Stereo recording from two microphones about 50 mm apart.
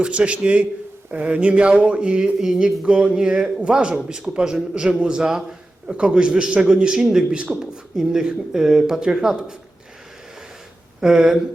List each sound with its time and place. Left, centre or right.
0.0 s a man's voice: right
11.0 s a man's voice: centre